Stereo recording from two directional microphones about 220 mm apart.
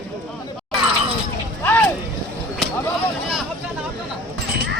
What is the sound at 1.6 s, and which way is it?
Boat, 10° left (ahead or behind).